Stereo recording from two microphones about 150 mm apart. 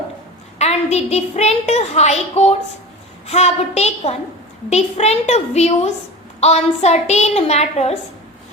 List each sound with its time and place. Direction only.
0.6 s a woman's voice: 45° left (ahead or behind)